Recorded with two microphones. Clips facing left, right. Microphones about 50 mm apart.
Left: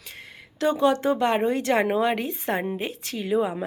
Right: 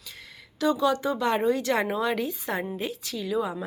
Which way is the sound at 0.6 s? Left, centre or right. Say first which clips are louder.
Left 3 dB; left.